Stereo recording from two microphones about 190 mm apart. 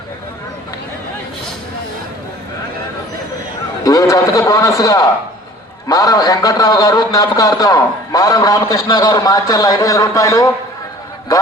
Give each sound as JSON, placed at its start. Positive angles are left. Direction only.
{"t": 3.8, "sound": "a man's voice", "side_deg": 20}